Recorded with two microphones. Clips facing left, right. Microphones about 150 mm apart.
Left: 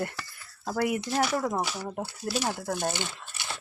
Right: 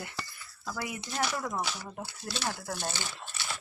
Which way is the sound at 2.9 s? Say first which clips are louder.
Left 4 dB; 15° left (ahead or behind).